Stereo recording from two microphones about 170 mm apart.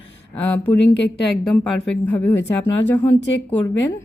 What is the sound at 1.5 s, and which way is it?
Speech, 5° left (ahead or behind).